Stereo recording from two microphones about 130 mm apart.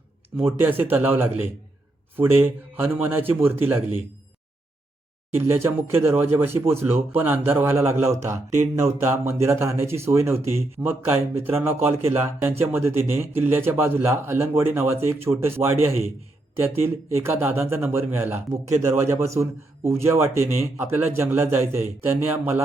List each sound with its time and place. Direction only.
0.6 s a man's voice: 15° right (ahead or behind)
5.3 s speech: 20° right (ahead or behind)